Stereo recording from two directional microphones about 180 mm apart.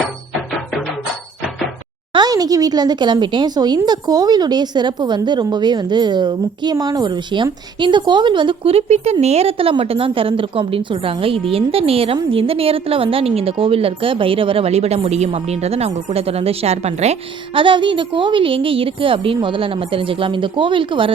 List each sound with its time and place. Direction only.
2.1 s a woman's voice: 20° right (ahead or behind)